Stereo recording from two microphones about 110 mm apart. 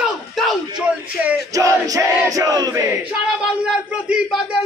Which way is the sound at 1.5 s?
30° right (ahead or behind).